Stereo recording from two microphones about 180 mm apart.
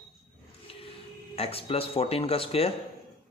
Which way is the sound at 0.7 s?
30° left (ahead or behind).